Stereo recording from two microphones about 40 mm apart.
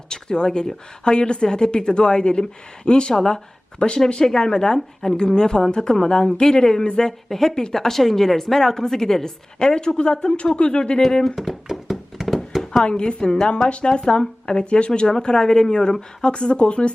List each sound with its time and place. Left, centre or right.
0.1 s a woman's voice: centre
3.8 s a woman's voice: left
11.3 s a sound: centre
12.8 s a woman's voice: left